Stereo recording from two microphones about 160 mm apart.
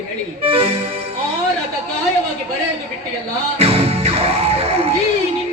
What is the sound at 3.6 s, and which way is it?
Music, 40° right (ahead or behind).